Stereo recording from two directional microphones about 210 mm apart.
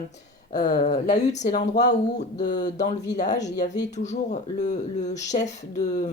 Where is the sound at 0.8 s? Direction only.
35° left (ahead or behind).